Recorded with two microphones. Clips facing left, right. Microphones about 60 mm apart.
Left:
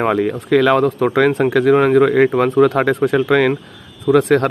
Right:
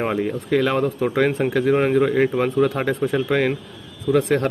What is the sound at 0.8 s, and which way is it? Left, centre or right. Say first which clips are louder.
Speech: left 5 dB; left.